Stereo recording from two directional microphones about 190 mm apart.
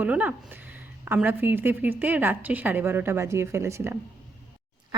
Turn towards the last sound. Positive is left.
turn(degrees=-15)  # may be behind; listen again after turning